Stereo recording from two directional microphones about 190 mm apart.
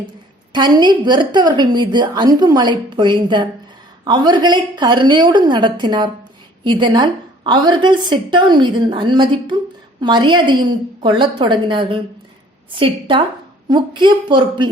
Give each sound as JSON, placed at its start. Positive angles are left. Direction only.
{"t": 0.5, "sound": "a woman's voice", "side_deg": -25}